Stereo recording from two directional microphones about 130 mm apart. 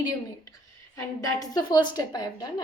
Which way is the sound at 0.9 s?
30° left (ahead or behind).